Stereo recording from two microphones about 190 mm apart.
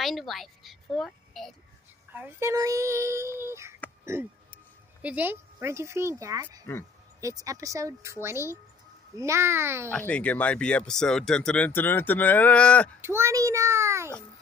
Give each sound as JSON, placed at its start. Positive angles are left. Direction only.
{"t": 0.0, "sound": "a woman's voice", "side_deg": 0}
{"t": 2.1, "sound": "speech", "side_deg": -10}
{"t": 4.0, "sound": "a sound", "side_deg": -10}
{"t": 5.0, "sound": "speech", "side_deg": -10}
{"t": 9.8, "sound": "speech", "side_deg": 5}
{"t": 13.0, "sound": "speech", "side_deg": -15}